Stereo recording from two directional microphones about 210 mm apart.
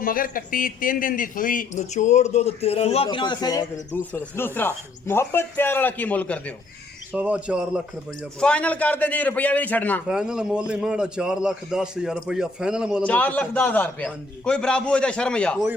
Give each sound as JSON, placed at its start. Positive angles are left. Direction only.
{"t": 0.0, "sound": "a man's voice", "side_deg": 40}
{"t": 7.1, "sound": "a man's voice", "side_deg": -5}
{"t": 10.1, "sound": "a man's voice", "side_deg": -5}
{"t": 13.0, "sound": "a man's voice", "side_deg": 5}